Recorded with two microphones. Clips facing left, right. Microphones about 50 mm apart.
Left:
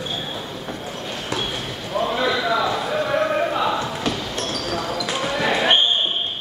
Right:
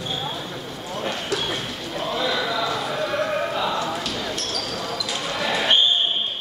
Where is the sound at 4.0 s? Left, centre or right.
Left.